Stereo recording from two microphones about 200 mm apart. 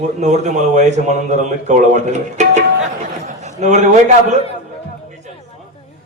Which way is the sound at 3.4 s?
35° right (ahead or behind).